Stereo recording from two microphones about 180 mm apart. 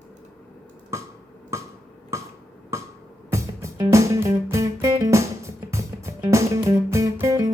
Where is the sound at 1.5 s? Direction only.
15° right (ahead or behind).